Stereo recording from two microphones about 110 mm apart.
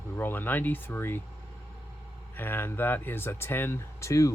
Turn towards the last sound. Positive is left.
turn(degrees=25)  # may be behind; listen again after turning